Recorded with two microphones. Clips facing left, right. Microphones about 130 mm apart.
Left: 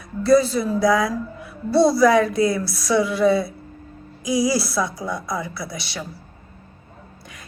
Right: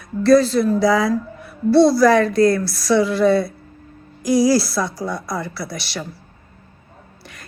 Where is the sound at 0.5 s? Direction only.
Centre (ahead or behind).